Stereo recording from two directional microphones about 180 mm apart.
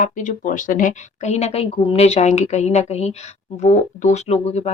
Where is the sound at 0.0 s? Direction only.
45° left (ahead or behind).